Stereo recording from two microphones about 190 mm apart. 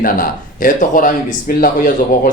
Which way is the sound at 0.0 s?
45° left (ahead or behind).